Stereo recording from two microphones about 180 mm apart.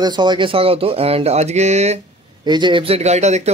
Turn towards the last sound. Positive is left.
turn(degrees=-40)  # may be behind; listen again after turning